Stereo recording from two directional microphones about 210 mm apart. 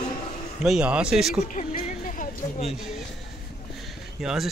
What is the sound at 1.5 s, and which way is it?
Music, 40° left (ahead or behind).